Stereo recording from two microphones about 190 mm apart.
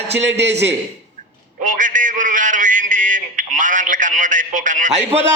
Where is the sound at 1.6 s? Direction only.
45° right (ahead or behind).